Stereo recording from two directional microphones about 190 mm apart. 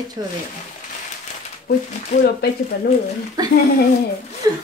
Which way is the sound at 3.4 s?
20° right (ahead or behind).